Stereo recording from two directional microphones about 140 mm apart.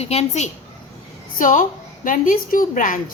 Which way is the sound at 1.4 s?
70° left (ahead or behind).